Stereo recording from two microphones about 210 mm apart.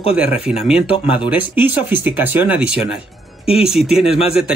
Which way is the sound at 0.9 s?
25° left (ahead or behind).